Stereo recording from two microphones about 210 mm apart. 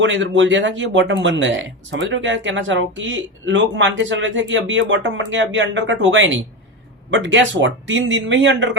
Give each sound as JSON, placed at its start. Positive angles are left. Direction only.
{"t": 0.0, "sound": "speech", "side_deg": -65}